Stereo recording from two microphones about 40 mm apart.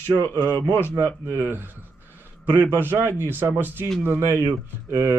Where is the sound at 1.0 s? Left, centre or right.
Right.